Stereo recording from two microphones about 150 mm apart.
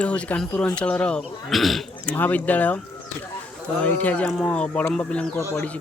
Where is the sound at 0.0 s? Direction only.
10° left (ahead or behind).